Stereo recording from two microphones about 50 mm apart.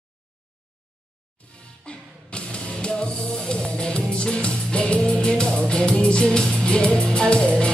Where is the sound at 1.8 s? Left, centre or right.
Left.